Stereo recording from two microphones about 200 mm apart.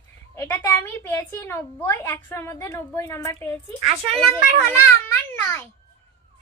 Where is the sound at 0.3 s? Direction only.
10° left (ahead or behind).